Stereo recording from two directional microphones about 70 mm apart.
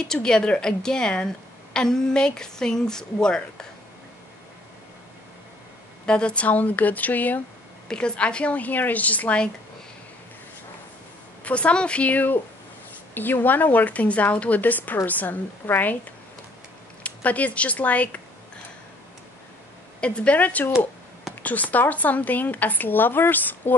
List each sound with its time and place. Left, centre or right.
0.1 s a woman's voice: centre
6.0 s speech: centre
7.9 s speech: centre
11.4 s speech: centre
17.0 s speech: left
20.0 s speech: centre